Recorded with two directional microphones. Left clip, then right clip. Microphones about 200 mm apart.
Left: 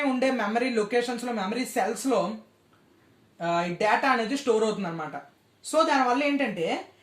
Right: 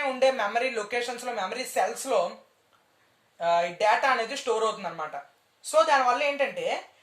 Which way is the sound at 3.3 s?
25° right (ahead or behind).